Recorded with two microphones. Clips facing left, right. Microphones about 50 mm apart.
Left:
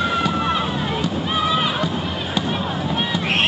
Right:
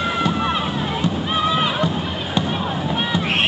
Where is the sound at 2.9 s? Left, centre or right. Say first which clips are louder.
Right 1 dB; centre.